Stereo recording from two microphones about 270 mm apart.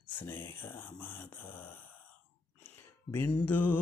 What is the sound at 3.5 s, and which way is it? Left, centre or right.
Mantra, left.